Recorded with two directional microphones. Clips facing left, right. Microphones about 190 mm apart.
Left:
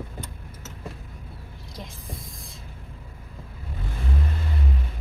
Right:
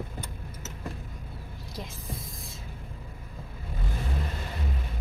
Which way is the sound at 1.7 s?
Centre (ahead or behind).